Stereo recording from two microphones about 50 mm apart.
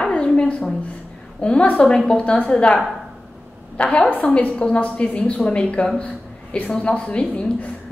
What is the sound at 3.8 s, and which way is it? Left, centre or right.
A woman's voice, left.